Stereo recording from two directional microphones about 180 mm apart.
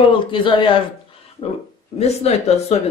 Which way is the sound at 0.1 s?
30° left (ahead or behind).